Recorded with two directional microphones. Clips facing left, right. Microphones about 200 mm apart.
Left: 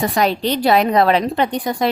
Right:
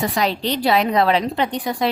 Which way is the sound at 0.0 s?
50° left (ahead or behind).